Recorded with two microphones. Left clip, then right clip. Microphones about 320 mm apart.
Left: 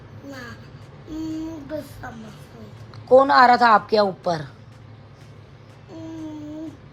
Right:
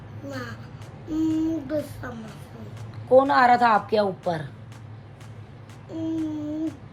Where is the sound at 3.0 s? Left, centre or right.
Centre.